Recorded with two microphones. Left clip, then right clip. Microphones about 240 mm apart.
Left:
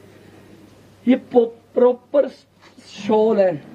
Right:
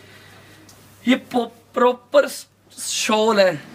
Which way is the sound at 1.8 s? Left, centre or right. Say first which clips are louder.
Even; right.